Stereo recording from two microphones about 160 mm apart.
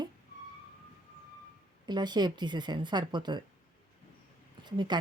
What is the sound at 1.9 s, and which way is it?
A woman's voice, 25° right (ahead or behind).